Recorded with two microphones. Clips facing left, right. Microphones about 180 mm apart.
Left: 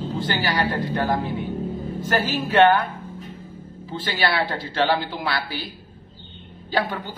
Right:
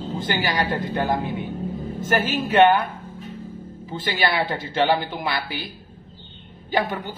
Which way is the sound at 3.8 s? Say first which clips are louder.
Even; 15° right (ahead or behind).